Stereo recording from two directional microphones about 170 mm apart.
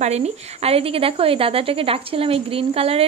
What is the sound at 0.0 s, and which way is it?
A woman's voice, 40° right (ahead or behind).